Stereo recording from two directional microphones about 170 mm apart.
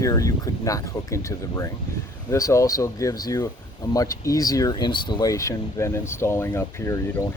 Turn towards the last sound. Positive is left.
turn(degrees=15)  # may be behind; listen again after turning